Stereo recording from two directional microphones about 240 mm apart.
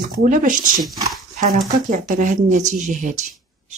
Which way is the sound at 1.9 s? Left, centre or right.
Right.